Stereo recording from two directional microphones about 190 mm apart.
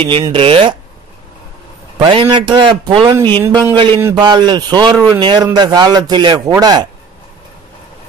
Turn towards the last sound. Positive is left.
turn(degrees=-20)  # may be behind; listen again after turning